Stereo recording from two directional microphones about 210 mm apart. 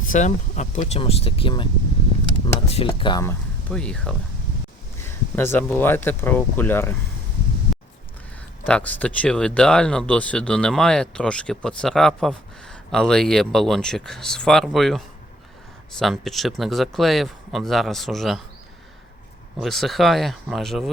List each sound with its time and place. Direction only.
0.0 s speech: 35° left (ahead or behind)
2.6 s speech: 25° left (ahead or behind)
3.7 s speech: 5° left (ahead or behind)
8.6 s speech: 5° left (ahead or behind)
19.5 s speech: centre (ahead or behind)